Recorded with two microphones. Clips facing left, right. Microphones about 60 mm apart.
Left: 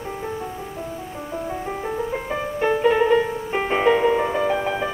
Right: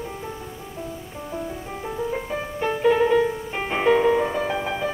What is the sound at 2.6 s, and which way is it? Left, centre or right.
Music, left.